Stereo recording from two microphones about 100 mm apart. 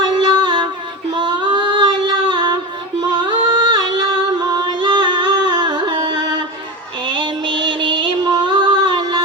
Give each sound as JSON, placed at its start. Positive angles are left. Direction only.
{"t": 0.2, "sound": "music", "side_deg": -50}
{"t": 1.1, "sound": "female singing", "side_deg": -50}
{"t": 3.0, "sound": "music", "side_deg": -50}